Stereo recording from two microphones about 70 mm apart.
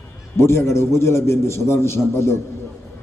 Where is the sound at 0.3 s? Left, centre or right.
Left.